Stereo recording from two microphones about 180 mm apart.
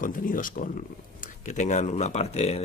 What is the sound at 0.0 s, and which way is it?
Speech, 50° left (ahead or behind).